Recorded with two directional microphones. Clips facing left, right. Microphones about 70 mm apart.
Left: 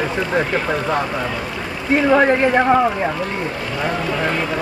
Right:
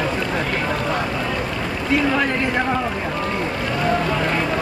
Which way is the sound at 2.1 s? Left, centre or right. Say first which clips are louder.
Left 7 dB; left.